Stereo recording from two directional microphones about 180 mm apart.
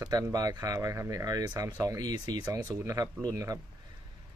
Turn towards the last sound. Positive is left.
turn(degrees=-20)  # may be behind; listen again after turning